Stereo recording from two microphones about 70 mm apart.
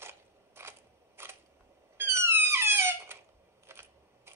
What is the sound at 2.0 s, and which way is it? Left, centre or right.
Squeak, right.